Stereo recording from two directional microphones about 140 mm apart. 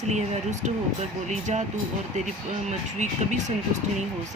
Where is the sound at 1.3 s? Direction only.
60° right (ahead or behind).